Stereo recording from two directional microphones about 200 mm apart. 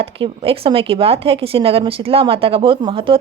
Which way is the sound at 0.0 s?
30° right (ahead or behind).